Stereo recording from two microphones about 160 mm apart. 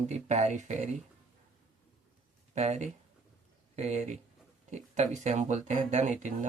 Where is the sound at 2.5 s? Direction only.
45° right (ahead or behind).